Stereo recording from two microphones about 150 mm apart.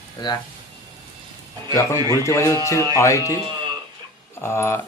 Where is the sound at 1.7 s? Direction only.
20° left (ahead or behind).